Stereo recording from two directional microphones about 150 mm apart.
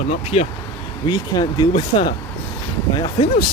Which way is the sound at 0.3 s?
35° left (ahead or behind).